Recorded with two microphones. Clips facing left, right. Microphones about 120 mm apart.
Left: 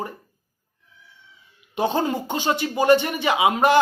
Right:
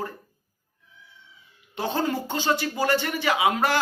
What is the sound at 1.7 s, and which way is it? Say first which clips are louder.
A man's voice: left 4 dB; 15° left (ahead or behind).